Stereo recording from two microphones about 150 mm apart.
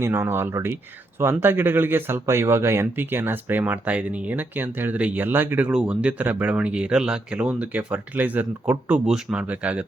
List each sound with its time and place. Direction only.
0.0 s speech: 20° right (ahead or behind)